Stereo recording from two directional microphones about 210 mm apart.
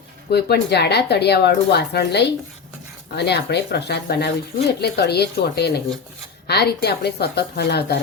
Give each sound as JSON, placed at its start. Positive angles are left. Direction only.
{"t": 0.3, "sound": "speech", "side_deg": 50}